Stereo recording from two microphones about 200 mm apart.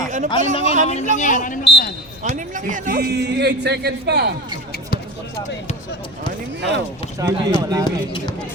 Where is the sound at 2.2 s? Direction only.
40° right (ahead or behind).